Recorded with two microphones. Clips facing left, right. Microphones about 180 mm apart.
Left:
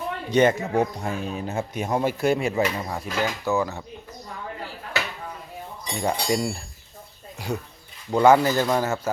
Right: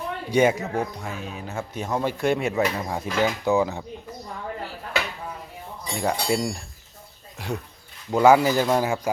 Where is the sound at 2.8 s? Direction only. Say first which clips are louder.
Right 3 dB; 15° right (ahead or behind).